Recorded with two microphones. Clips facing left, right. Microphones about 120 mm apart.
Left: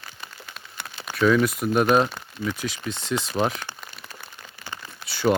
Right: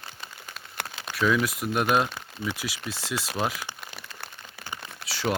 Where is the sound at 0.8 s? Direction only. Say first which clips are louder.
Right 4 dB; 90° right.